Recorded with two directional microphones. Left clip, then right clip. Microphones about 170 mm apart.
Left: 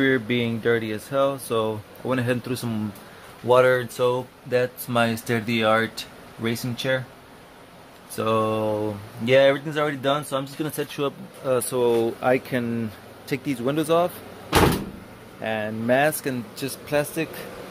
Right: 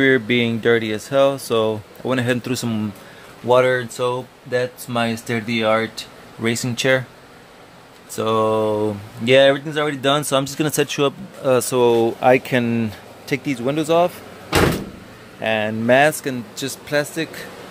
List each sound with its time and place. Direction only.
0.0 s speech: 10° right (ahead or behind)
3.4 s speech: centre (ahead or behind)
6.4 s speech: 15° right (ahead or behind)
8.2 s speech: 5° right (ahead or behind)
10.0 s speech: 20° right (ahead or behind)
13.3 s speech: 5° right (ahead or behind)
15.4 s speech: 10° right (ahead or behind)